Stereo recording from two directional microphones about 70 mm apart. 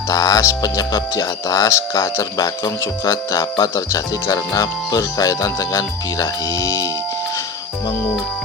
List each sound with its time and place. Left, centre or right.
0.1 s speech: left